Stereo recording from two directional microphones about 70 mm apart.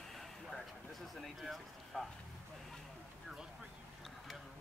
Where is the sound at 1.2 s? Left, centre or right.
Centre.